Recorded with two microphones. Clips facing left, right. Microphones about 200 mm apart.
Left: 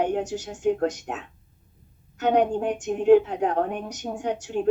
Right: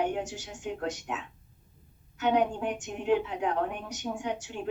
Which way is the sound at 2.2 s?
45° left (ahead or behind).